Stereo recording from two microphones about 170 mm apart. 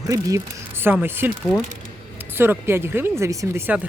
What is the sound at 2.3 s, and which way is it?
Speech, 15° right (ahead or behind).